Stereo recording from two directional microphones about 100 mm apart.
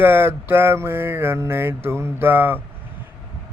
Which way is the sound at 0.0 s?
20° right (ahead or behind).